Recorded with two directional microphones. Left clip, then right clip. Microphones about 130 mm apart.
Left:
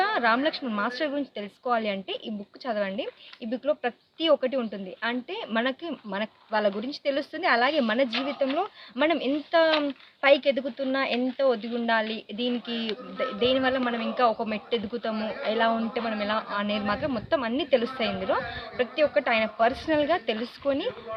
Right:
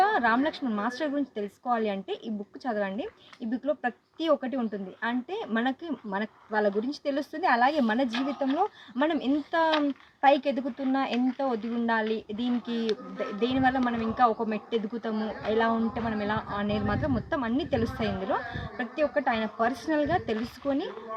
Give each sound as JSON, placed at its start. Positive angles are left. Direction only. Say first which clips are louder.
{"t": 0.0, "sound": "speech", "louder": "even", "side_deg": 15}